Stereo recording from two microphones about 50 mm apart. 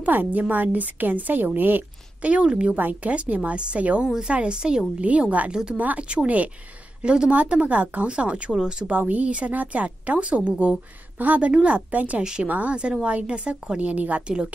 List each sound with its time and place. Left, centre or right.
0.0 s a woman's voice: right
2.2 s a woman's voice: right
5.5 s speech: centre
5.8 s a woman's voice: right
8.8 s a woman's voice: right
12.2 s speech: centre
12.4 s a woman's voice: right